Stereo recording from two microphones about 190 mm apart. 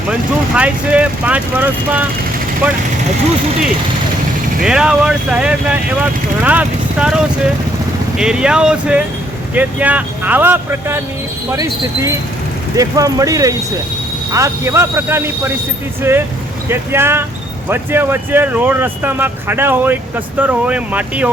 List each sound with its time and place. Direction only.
0.1 s speech: 5° right (ahead or behind)
4.6 s speech: 5° right (ahead or behind)